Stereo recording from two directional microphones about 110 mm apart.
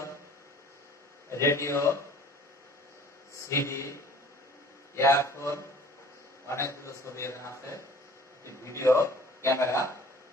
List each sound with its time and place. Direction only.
1.3 s a man's voice: 25° left (ahead or behind)
3.4 s a man's voice: 25° left (ahead or behind)